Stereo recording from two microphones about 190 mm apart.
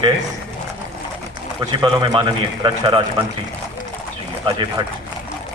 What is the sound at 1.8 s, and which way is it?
A man's voice, 25° right (ahead or behind).